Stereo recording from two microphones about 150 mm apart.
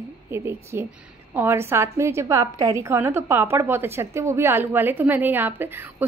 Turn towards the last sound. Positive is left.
turn(degrees=-15)  # may be behind; listen again after turning